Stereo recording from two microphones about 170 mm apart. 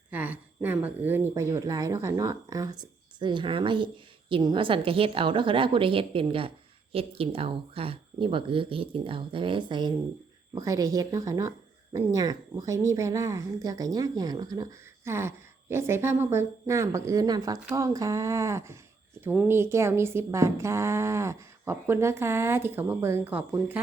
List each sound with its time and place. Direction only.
0.1 s a woman's voice: 10° right (ahead or behind)